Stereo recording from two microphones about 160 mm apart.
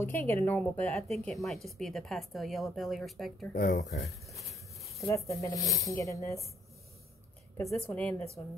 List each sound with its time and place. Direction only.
0.0 s speech: 15° left (ahead or behind); by 3.5 s centre (ahead or behind)
3.5 s speech: 70° left (ahead or behind)
4.3 s a sound: centre (ahead or behind)
5.1 s speech: 20° left (ahead or behind)
5.6 s speech: centre (ahead or behind)
5.9 s speech: 20° left (ahead or behind)
7.9 s speech: 10° left (ahead or behind)